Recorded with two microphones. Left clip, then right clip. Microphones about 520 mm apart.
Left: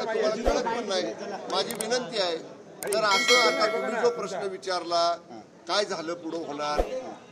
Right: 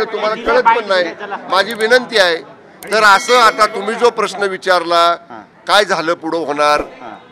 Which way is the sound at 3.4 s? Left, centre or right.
Right.